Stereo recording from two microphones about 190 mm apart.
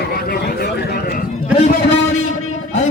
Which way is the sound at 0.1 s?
55° left (ahead or behind).